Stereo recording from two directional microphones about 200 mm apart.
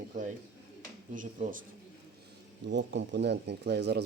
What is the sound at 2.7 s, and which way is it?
Speech, 60° right (ahead or behind).